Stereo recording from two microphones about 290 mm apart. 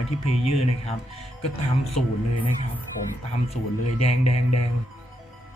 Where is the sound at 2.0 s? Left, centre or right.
Left.